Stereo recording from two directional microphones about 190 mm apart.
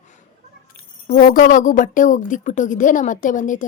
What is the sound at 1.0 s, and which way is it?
A woman's voice, 45° left (ahead or behind).